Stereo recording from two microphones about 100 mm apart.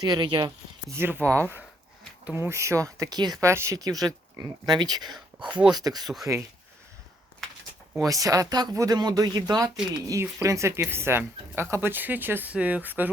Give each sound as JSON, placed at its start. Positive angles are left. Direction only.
{"t": 0.0, "sound": "speech", "side_deg": -45}
{"t": 0.9, "sound": "speech", "side_deg": -25}
{"t": 3.4, "sound": "speech", "side_deg": -30}
{"t": 5.5, "sound": "speech", "side_deg": -15}
{"t": 5.7, "sound": "speech", "side_deg": -40}
{"t": 8.0, "sound": "speech", "side_deg": -35}